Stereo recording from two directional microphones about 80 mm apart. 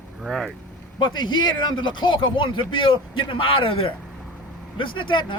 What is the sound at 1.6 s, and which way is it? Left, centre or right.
A man's voice, left.